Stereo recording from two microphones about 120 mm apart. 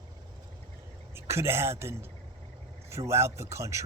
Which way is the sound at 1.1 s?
20° right (ahead or behind).